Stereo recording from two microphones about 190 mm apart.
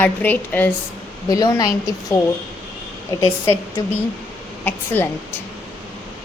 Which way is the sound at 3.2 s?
15° left (ahead or behind).